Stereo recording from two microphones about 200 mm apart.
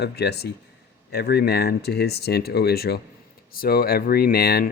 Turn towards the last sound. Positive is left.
turn(degrees=50)  # may be behind; listen again after turning